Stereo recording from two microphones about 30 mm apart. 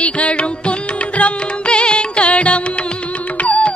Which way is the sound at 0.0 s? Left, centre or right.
Left.